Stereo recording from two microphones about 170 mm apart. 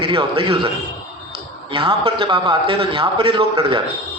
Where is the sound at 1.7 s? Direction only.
30° right (ahead or behind).